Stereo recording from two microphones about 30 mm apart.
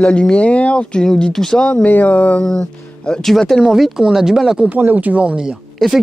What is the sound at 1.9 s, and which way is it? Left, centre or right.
Speech, left.